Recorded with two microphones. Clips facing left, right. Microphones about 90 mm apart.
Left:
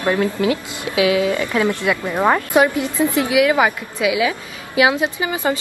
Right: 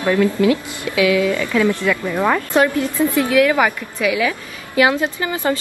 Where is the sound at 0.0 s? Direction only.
25° left (ahead or behind).